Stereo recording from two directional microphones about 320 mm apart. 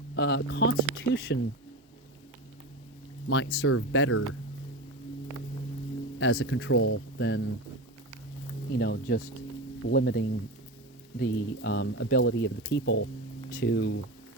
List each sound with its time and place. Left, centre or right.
0.2 s speech: left
3.2 s speech: left
6.1 s speech: left
8.7 s speech: left